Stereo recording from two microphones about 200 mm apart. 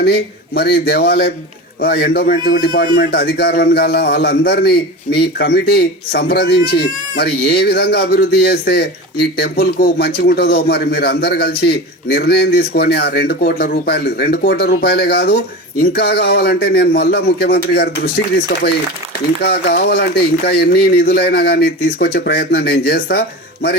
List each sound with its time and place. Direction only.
0.0 s a man's voice: 55° left (ahead or behind)
19.4 s a man's voice: 55° left (ahead or behind)